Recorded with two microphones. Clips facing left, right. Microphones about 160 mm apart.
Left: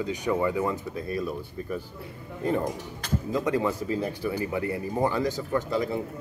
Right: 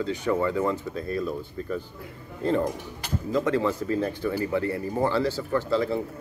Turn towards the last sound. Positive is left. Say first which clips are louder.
# right 2 dB
turn(degrees=15)  # may be behind; listen again after turning